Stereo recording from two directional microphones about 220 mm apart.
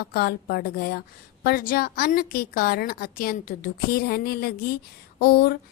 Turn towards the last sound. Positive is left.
turn(degrees=45)  # may be behind; listen again after turning